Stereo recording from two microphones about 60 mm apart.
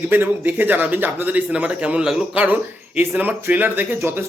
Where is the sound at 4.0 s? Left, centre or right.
Right.